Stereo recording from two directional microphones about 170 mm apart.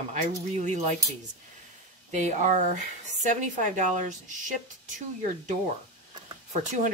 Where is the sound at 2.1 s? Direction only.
45° right (ahead or behind).